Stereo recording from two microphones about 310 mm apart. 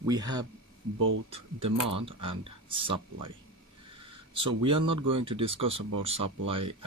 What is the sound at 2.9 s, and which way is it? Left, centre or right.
Speech, right.